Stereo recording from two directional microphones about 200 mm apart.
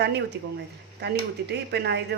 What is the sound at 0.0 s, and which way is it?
Speech, 55° right (ahead or behind).